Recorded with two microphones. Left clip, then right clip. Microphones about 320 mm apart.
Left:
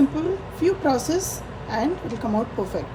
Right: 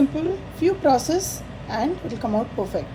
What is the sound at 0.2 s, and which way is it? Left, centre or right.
A woman's voice, centre.